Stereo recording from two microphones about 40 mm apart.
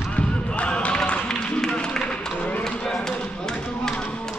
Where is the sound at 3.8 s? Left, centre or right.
Left.